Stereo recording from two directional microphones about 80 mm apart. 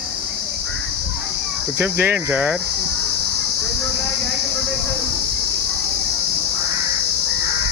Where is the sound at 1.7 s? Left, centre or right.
Right.